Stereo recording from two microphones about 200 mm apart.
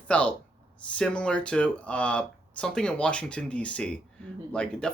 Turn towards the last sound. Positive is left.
turn(degrees=5)  # may be behind; listen again after turning